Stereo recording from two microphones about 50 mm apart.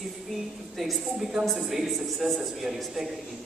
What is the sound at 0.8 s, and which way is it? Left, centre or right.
A man's voice, centre.